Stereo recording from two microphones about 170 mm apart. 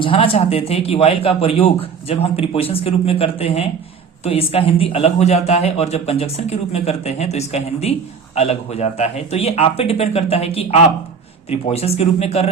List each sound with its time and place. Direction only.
0.0 s a man's voice: 30° left (ahead or behind)